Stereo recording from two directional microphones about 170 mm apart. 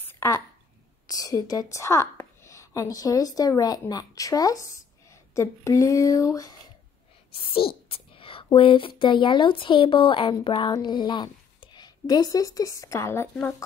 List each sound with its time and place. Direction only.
0.1 s a sound: 15° left (ahead or behind)
1.0 s a woman's voice: 20° left (ahead or behind)
7.5 s speech: 35° left (ahead or behind); by 13.6 s 10° left (ahead or behind)